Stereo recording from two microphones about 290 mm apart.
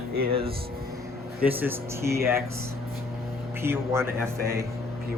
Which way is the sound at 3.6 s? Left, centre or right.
Centre.